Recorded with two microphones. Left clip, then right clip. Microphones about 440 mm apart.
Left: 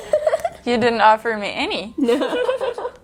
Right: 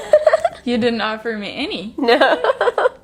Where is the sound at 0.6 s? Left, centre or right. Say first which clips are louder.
Left 5 dB; left.